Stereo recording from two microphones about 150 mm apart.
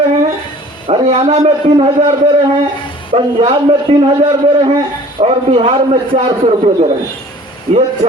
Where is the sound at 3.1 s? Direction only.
40° right (ahead or behind).